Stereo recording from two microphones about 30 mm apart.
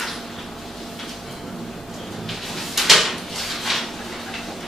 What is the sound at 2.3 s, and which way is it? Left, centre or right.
Drawer open or close, centre.